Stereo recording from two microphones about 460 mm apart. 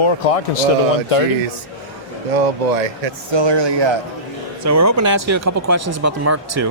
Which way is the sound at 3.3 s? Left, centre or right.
Right.